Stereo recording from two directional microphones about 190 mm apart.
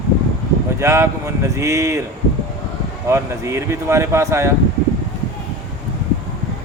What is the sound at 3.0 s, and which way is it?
Speech, 15° right (ahead or behind).